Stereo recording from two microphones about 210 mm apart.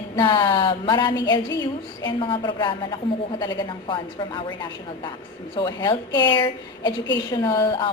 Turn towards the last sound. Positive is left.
turn(degrees=20)  # may be behind; listen again after turning